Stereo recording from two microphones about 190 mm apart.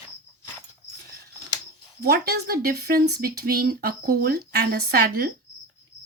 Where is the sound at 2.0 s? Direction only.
55° right (ahead or behind).